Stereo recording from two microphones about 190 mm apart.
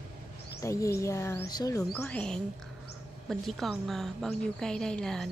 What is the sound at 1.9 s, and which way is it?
A woman's voice, 5° left (ahead or behind).